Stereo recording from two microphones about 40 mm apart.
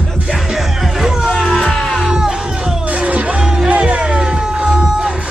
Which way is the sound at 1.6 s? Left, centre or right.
Centre.